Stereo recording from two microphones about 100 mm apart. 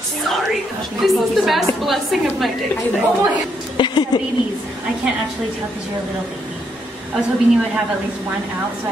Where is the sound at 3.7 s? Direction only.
50° left (ahead or behind).